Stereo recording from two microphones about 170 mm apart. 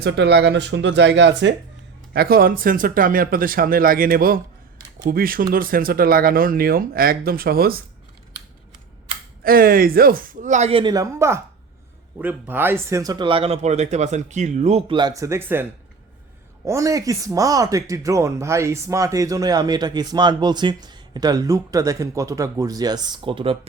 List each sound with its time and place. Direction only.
0.0 s speech: 80° right
2.1 s speech: 60° right (ahead or behind)
9.4 s speech: 60° right (ahead or behind); by 15.6 s 15° right (ahead or behind)
16.6 s speech: 20° right (ahead or behind)